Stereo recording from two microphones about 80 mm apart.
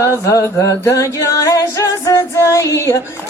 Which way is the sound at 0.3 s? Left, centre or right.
Left.